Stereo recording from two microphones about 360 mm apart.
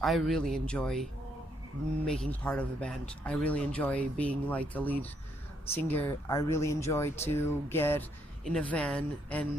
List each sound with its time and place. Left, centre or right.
0.0 s speech: centre
2.0 s speech: centre